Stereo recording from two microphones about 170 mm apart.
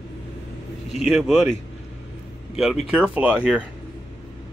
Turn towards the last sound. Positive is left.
turn(degrees=-5)  # may be behind; listen again after turning